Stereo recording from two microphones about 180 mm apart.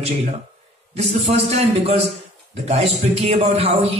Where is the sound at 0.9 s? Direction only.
35° right (ahead or behind).